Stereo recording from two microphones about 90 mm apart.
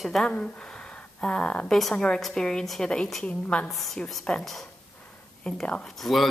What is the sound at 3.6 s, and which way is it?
Speech, centre (ahead or behind).